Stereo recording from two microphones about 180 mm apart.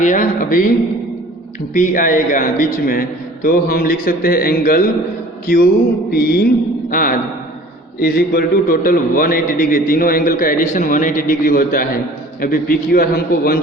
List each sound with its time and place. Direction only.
0.0 s a man's voice: 45° left (ahead or behind)
1.7 s a man's voice: 45° left (ahead or behind)
6.1 s a man's voice: 60° left (ahead or behind)